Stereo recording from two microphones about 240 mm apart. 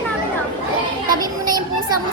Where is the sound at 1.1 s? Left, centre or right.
Centre.